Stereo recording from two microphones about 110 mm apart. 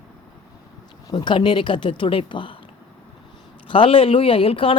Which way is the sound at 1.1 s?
45° left (ahead or behind).